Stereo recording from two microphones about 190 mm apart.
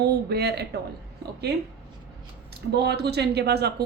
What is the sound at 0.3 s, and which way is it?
Speech, 60° right (ahead or behind).